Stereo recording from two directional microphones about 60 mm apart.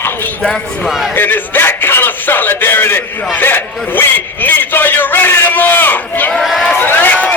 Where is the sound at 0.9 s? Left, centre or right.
Centre.